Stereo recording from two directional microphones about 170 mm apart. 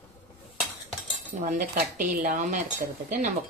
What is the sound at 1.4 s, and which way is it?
Speech, 50° right (ahead or behind).